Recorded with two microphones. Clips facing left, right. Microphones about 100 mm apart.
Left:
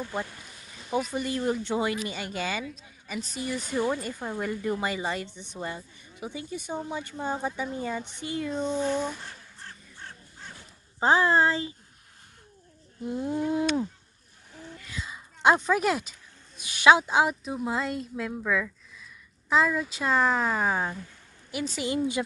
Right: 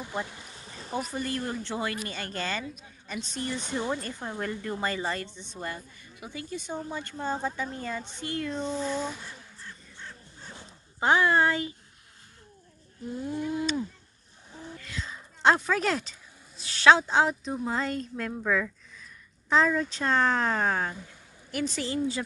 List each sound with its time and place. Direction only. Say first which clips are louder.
0.0 s speech: left 1 dB; 15° right (ahead or behind)
0.6 s a sound: left 4 dB; 35° right (ahead or behind)
1.1 s a woman's voice: left 4 dB; 15° left (ahead or behind)
8.5 s a woman's voice: left 5 dB; 5° left (ahead or behind)
9.7 s bird: even; 55° left (ahead or behind)
11.0 s speech: left 1 dB; 30° left (ahead or behind)
13.0 s speech: left 4 dB; 20° left (ahead or behind)
14.5 s gasp: right 2 dB; 20° right (ahead or behind)
14.8 s a woman's voice: left 2 dB; 10° left (ahead or behind)